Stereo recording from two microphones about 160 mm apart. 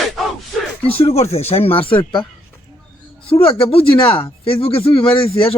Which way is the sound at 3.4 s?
35° left (ahead or behind).